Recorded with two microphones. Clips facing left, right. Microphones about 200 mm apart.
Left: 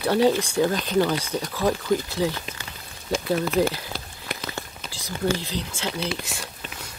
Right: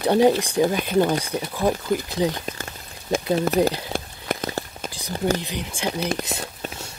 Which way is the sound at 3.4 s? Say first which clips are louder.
Right 2 dB; 40° right (ahead or behind).